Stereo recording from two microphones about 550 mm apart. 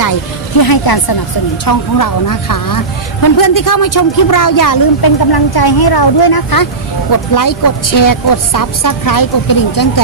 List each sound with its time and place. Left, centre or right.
0.6 s speech: left